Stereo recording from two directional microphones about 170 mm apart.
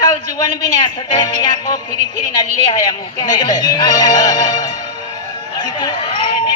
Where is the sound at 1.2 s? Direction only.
25° left (ahead or behind).